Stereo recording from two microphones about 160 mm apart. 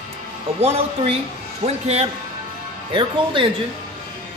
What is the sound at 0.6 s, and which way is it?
Speech, 40° right (ahead or behind).